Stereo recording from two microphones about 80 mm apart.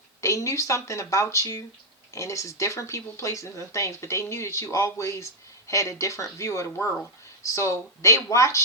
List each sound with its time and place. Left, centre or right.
0.2 s speech: left